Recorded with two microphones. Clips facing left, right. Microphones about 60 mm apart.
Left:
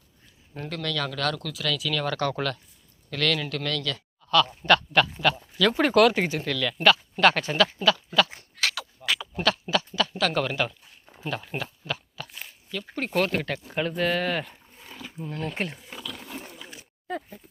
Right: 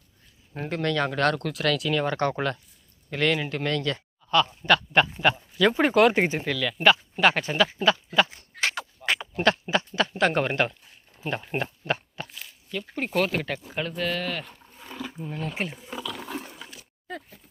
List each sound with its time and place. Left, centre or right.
0.7 s speech: right
1.9 s speech: right
3.9 s a sound: right
4.6 s speech: centre; by 6.4 s right
6.4 s speech: centre
8.6 s a sound: right
9.5 s speech: right
11.2 s speech: centre
16.3 s a sound: centre